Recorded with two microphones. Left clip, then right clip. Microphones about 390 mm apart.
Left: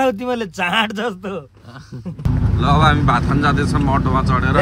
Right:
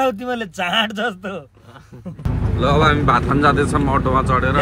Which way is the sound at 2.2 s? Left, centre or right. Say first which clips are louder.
Left 3 dB; centre.